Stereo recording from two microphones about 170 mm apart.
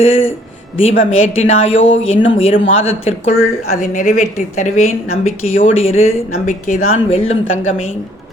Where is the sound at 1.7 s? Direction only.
90° left.